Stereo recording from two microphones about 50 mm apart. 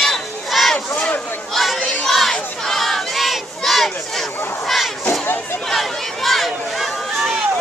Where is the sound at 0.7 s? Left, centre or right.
Left.